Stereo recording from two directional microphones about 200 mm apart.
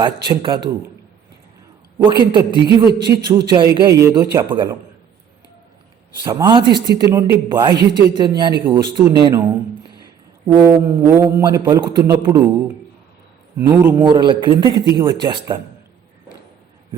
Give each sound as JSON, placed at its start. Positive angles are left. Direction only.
{"t": 0.0, "sound": "a man's voice", "side_deg": -20}
{"t": 2.0, "sound": "a man's voice", "side_deg": -25}
{"t": 6.2, "sound": "a man's voice", "side_deg": -25}
{"t": 10.4, "sound": "a man's voice", "side_deg": -20}